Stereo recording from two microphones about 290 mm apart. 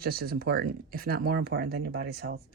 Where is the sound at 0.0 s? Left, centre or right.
Right.